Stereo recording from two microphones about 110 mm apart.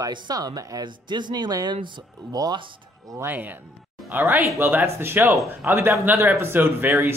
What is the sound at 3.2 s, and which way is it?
Speech, 15° right (ahead or behind).